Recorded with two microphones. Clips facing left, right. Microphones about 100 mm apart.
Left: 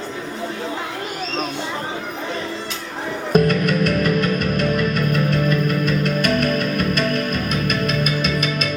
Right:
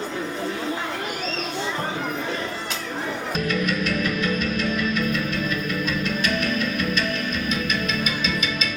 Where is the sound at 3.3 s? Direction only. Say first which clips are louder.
Left 9 dB; 55° left (ahead or behind).